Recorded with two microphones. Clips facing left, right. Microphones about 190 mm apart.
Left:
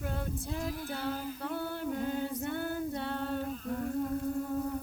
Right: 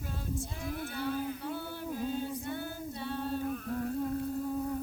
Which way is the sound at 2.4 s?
55° left (ahead or behind).